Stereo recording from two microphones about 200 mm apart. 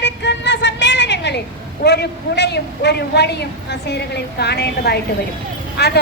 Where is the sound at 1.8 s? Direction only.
55° left (ahead or behind).